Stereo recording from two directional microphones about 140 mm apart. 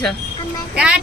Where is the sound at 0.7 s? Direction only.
10° right (ahead or behind).